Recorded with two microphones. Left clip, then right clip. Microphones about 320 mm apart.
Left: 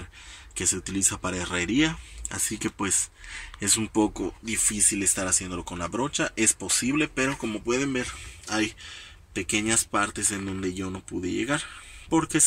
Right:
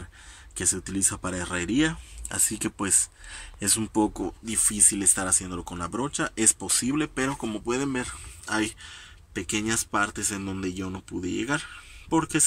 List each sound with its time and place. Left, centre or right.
0.6 s speech: centre